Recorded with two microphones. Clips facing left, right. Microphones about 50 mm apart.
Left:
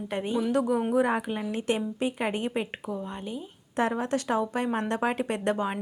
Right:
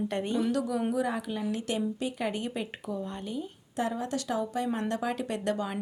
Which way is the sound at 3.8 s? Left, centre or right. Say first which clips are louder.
Left 4 dB; left.